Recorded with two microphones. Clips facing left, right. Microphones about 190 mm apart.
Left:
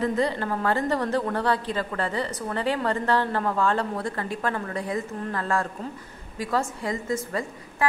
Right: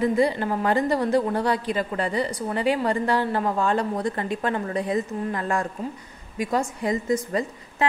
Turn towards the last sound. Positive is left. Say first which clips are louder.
# right 4 dB
turn(degrees=-20)  # may be behind; listen again after turning